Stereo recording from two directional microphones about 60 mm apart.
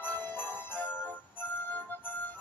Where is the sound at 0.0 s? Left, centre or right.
Left.